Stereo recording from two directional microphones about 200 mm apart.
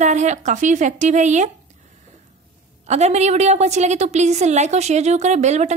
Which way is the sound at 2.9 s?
35° right (ahead or behind).